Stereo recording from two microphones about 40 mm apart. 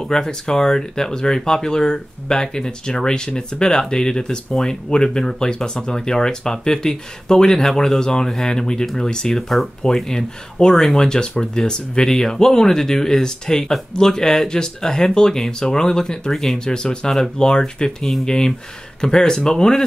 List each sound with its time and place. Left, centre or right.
0.0 s speech: centre